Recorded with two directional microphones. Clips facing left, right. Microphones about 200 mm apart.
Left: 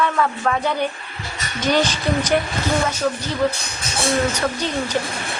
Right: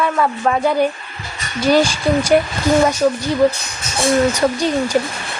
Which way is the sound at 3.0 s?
20° right (ahead or behind).